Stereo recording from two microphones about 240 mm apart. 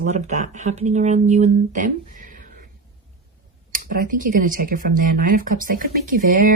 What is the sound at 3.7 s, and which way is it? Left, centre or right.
Speech, right.